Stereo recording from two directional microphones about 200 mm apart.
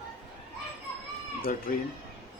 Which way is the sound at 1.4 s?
45° left (ahead or behind).